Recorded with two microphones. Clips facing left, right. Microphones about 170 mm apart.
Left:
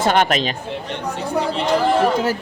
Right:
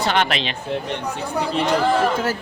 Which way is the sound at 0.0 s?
45° left (ahead or behind).